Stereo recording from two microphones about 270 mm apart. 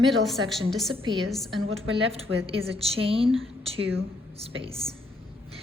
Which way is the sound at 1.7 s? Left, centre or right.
Right.